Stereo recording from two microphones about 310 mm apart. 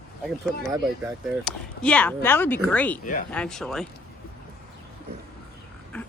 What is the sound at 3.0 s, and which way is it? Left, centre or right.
Speech, left.